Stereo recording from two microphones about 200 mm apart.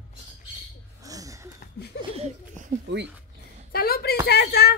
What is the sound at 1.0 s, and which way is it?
Gasp, 15° right (ahead or behind).